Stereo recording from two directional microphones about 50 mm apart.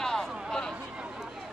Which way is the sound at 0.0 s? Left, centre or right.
Centre.